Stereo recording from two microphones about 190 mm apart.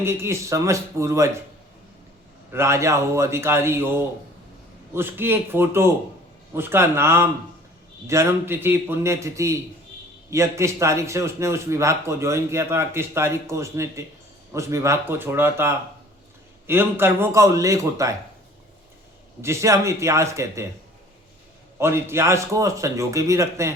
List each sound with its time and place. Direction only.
0.0 s a man's voice: 15° right (ahead or behind)
2.5 s a man's voice: 15° right (ahead or behind)
19.4 s a man's voice: 15° right (ahead or behind)
21.8 s a man's voice: 15° right (ahead or behind)